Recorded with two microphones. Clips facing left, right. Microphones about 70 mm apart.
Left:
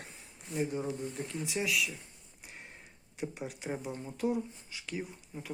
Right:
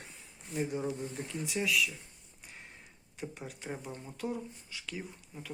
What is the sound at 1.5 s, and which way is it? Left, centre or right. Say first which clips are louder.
Speech: right 2 dB; centre.